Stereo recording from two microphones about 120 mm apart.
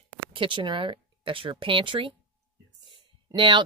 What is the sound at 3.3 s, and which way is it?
Speech, 40° right (ahead or behind).